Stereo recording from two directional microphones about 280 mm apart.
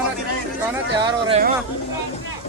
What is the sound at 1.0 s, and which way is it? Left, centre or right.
Speech, centre.